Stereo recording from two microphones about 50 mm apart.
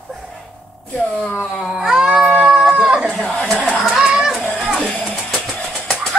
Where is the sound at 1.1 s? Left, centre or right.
Centre.